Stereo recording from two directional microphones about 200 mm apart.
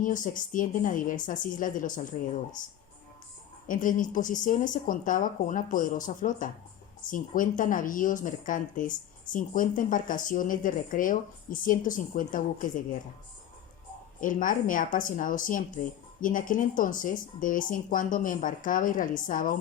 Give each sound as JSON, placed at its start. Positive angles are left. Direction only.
{"t": 0.0, "sound": "speech", "side_deg": 40}
{"t": 3.7, "sound": "speech", "side_deg": 40}
{"t": 14.2, "sound": "speech", "side_deg": 40}